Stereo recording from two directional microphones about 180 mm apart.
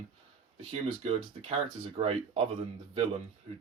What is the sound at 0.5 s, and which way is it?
Speech, 35° right (ahead or behind).